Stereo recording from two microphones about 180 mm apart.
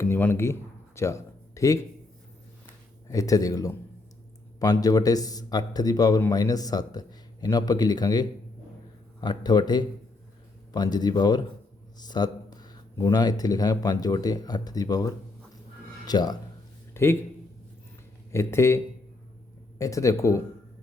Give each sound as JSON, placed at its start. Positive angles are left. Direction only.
{"t": 0.0, "sound": "a man's voice", "side_deg": 10}
{"t": 3.1, "sound": "a man's voice", "side_deg": 20}
{"t": 18.3, "sound": "speech", "side_deg": 15}
{"t": 19.8, "sound": "speech", "side_deg": 15}